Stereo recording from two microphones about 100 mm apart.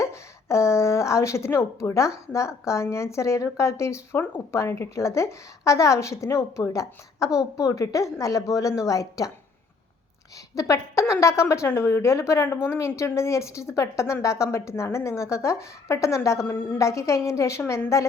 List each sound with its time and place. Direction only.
0.0 s a woman's voice: 30° left (ahead or behind)
10.5 s a woman's voice: 30° left (ahead or behind)